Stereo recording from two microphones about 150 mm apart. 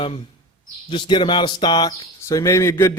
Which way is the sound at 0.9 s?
30° left (ahead or behind).